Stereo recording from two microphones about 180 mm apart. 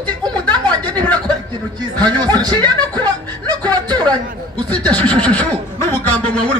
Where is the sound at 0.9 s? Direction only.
10° left (ahead or behind).